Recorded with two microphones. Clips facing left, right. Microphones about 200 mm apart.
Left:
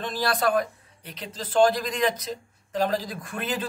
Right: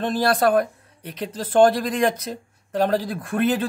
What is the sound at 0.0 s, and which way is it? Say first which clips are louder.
Speech: right 6 dB; 50° right (ahead or behind).